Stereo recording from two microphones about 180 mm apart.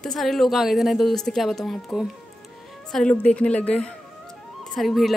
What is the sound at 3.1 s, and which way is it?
A woman's voice, 5° left (ahead or behind).